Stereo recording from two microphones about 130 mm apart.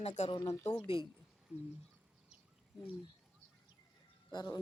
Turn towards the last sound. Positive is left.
turn(degrees=35)  # may be behind; listen again after turning